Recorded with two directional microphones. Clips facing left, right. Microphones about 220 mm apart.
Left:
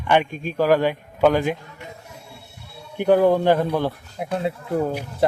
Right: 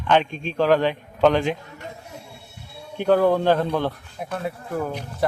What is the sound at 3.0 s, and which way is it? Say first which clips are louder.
A man's voice: left 2 dB; 15° left (ahead or behind).